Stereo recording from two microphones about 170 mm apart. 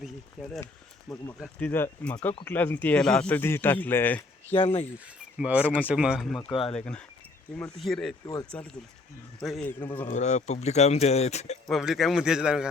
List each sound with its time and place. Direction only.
1.4 s speech: 5° left (ahead or behind)
4.5 s speech: 35° left (ahead or behind)
5.4 s a man's voice: 5° right (ahead or behind)
6.5 s speech: 30° left (ahead or behind)
6.7 s a man's voice: 5° left (ahead or behind)
10.1 s speech: 45° left (ahead or behind)
11.7 s a man's voice: centre (ahead or behind)